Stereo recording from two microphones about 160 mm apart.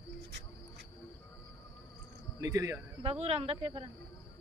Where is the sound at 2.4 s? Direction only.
20° right (ahead or behind).